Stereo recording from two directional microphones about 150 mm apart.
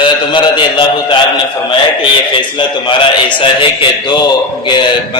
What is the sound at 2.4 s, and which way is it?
A man's voice, 30° left (ahead or behind).